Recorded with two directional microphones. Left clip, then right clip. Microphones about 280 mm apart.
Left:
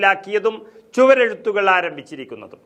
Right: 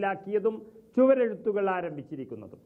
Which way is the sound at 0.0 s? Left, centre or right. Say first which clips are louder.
Left 11 dB; centre.